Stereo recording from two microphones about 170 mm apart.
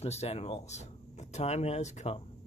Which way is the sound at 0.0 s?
40° left (ahead or behind).